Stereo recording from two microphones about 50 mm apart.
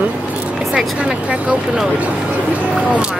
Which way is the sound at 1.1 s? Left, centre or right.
Right.